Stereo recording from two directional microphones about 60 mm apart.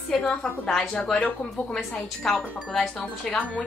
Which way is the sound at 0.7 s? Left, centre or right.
Centre.